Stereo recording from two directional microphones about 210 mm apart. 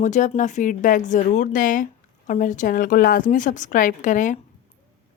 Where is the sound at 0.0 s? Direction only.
35° left (ahead or behind).